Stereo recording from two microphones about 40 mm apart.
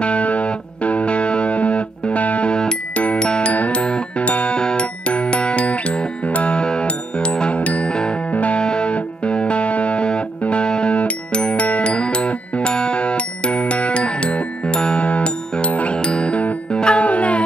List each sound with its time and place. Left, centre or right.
0.0 s music: left
3.3 s glockenspiel: left
3.5 s music: left
3.8 s music: left
4.3 s music: left
4.6 s music: left
7.9 s music: left
8.3 s music: left
17.0 s music: left